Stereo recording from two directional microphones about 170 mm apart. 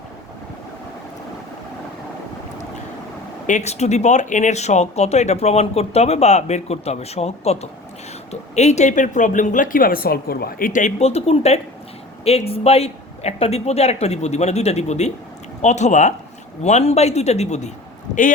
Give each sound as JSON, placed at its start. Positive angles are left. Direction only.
{"t": 3.4, "sound": "speech", "side_deg": 45}